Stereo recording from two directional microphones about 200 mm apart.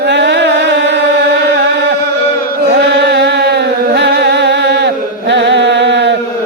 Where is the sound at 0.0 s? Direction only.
60° right (ahead or behind).